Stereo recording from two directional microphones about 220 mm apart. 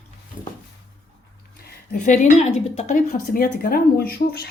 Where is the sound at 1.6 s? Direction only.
40° left (ahead or behind).